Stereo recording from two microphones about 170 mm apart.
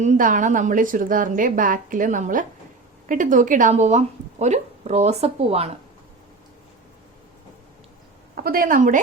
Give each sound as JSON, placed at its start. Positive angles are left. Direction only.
{"t": 0.0, "sound": "a woman's voice", "side_deg": -45}
{"t": 8.4, "sound": "speech", "side_deg": -55}